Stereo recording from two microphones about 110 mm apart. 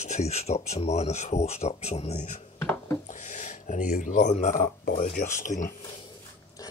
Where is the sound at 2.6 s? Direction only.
20° left (ahead or behind).